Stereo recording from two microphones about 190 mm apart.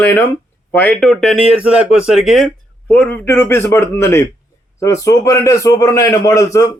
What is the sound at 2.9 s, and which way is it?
A man's voice, 10° left (ahead or behind).